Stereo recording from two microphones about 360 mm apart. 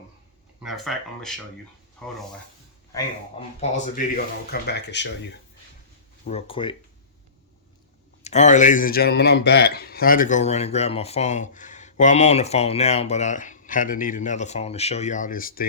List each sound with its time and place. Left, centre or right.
0.6 s speech: centre
3.6 s a man's voice: left
6.2 s speech: centre
8.2 s a man's voice: centre